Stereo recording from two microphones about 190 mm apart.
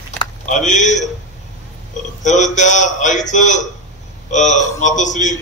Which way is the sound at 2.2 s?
40° left (ahead or behind).